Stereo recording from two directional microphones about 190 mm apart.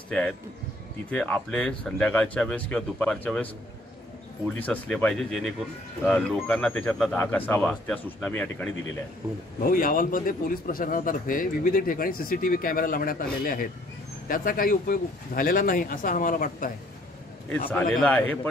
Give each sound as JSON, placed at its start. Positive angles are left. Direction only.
{"t": 1.1, "sound": "speech", "side_deg": 5}
{"t": 4.6, "sound": "speech", "side_deg": 10}
{"t": 9.6, "sound": "a man's voice", "side_deg": 50}
{"t": 17.5, "sound": "speech", "side_deg": 10}